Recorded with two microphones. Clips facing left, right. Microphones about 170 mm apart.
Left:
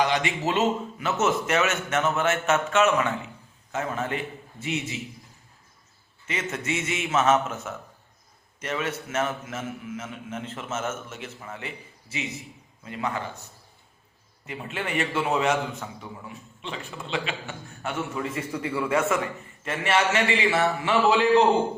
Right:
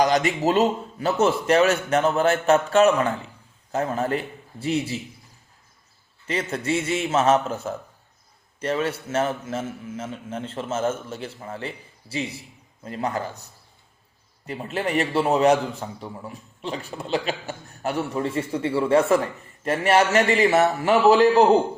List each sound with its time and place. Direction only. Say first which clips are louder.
0.0 s a man's voice: right 5 dB; 40° right (ahead or behind)
6.2 s a man's voice: right 4 dB; 35° right (ahead or behind)